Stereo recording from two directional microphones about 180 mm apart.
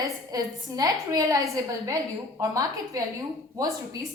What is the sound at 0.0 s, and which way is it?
A woman's voice, 20° right (ahead or behind).